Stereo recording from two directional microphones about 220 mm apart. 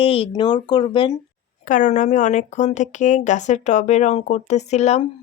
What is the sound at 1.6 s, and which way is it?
Speech, 35° left (ahead or behind).